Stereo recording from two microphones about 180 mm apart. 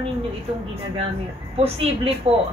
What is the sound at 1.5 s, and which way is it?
Speech, 35° right (ahead or behind).